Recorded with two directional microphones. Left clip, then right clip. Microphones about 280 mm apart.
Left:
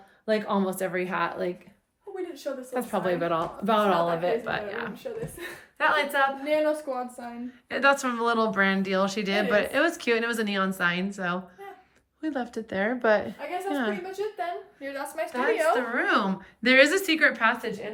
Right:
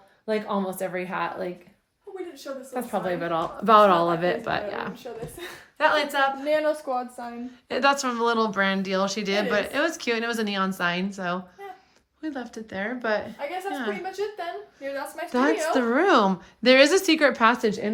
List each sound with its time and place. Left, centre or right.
0.3 s speech: centre
2.7 s speech: centre
3.7 s speech: right
5.7 s speech: centre
7.7 s speech: centre
15.3 s a woman's voice: centre